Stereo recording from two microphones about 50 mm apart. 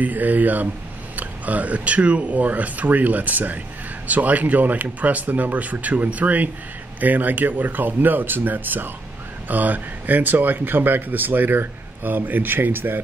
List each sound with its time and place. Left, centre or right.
0.0 s speech: right